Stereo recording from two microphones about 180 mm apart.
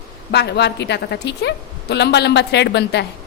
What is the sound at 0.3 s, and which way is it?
A woman's voice, 65° left (ahead or behind).